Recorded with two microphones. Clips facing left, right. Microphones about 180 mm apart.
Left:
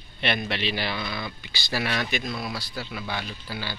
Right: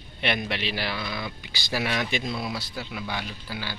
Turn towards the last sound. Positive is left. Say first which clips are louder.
# left 1 dB
turn(degrees=-10)  # may be behind; listen again after turning